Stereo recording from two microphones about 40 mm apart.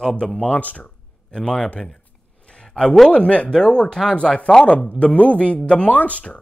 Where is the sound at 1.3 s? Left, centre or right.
Centre.